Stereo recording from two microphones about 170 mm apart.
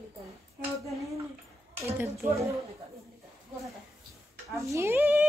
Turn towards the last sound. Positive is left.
turn(degrees=-10)  # may be behind; listen again after turning